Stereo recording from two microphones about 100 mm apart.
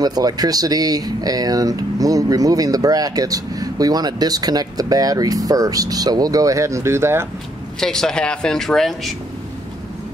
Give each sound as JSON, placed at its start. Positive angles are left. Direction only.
{"t": 0.0, "sound": "speech", "side_deg": -40}
{"t": 7.8, "sound": "speech", "side_deg": 5}